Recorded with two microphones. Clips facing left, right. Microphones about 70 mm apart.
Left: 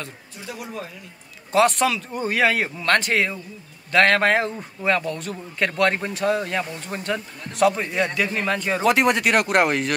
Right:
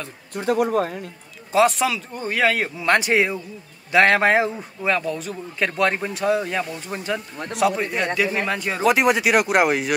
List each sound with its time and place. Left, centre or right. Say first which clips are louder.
0.3 s speech: right 18 dB; right
1.5 s a man's voice: even; centre
2.8 s a man's voice: right 3 dB; centre